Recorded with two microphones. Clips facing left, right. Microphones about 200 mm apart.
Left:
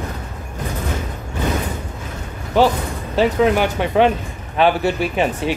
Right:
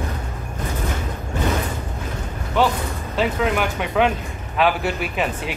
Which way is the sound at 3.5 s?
30° left (ahead or behind).